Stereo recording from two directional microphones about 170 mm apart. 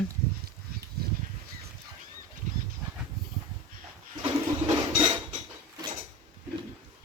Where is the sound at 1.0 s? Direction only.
65° right (ahead or behind).